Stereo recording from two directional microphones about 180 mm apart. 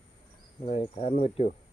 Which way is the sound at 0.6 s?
35° left (ahead or behind).